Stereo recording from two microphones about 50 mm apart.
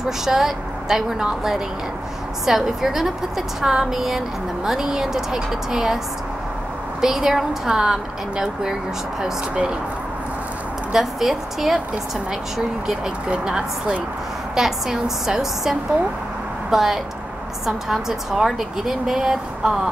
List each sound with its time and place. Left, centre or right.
0.2 s a woman's voice: centre
7.0 s a woman's voice: centre
10.9 s a woman's voice: centre